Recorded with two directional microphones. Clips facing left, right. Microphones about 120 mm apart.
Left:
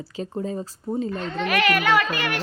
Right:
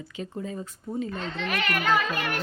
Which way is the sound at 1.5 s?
80° left.